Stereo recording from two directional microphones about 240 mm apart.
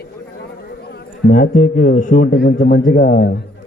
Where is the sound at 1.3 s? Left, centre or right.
Left.